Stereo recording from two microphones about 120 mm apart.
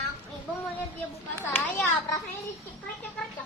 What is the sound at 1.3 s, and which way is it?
Speech, 15° left (ahead or behind).